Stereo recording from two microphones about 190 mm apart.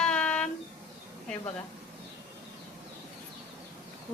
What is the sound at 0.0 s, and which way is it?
Music, 5° left (ahead or behind).